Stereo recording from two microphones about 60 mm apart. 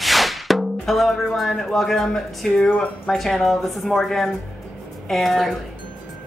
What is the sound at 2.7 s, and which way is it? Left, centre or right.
Speech, centre.